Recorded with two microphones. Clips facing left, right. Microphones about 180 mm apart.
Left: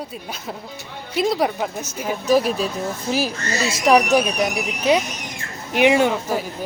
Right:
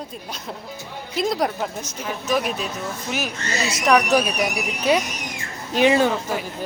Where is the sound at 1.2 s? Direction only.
5° left (ahead or behind).